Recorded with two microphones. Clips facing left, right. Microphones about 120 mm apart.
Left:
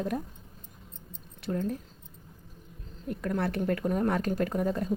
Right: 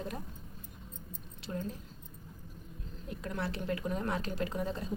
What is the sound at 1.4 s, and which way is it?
Speech, 55° left (ahead or behind).